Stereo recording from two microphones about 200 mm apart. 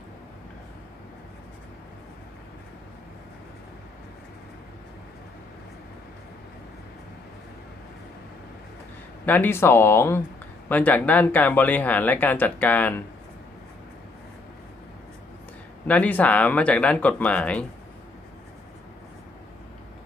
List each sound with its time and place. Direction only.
9.2 s speech: 10° left (ahead or behind)
15.9 s speech: 5° left (ahead or behind)